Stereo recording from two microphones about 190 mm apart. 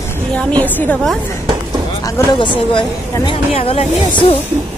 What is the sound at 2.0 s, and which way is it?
Speech, 20° left (ahead or behind).